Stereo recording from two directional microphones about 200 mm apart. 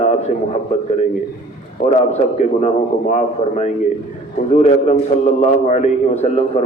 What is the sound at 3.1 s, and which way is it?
A man's voice, 35° left (ahead or behind).